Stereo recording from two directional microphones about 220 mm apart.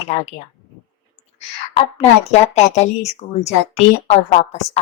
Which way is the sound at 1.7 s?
30° left (ahead or behind).